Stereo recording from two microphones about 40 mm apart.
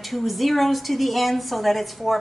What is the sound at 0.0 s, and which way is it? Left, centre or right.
A woman's voice, centre.